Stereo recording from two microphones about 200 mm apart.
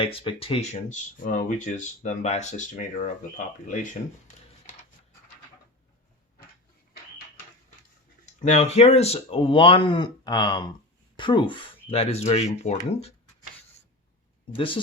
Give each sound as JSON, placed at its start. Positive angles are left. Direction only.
{"t": 0.0, "sound": "speech", "side_deg": 30}
{"t": 8.4, "sound": "speech", "side_deg": 35}
{"t": 14.5, "sound": "speech", "side_deg": 25}